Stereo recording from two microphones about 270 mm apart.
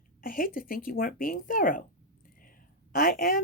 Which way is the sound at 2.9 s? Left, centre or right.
Left.